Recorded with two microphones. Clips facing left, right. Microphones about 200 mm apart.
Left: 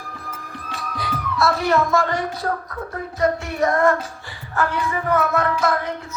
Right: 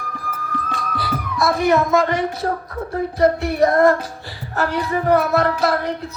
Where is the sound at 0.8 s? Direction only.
5° right (ahead or behind); by 2.5 s 20° right (ahead or behind).